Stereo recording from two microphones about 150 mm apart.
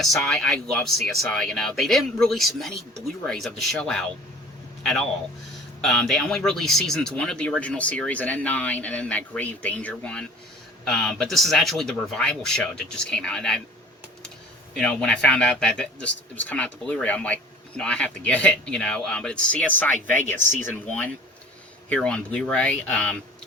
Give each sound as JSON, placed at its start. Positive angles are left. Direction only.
{"t": 0.0, "sound": "a man's voice", "side_deg": 0}
{"t": 14.8, "sound": "speech", "side_deg": 5}
{"t": 20.2, "sound": "speech", "side_deg": -55}
{"t": 20.8, "sound": "speech", "side_deg": 10}